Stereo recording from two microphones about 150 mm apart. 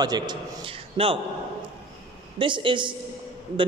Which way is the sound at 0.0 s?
30° right (ahead or behind).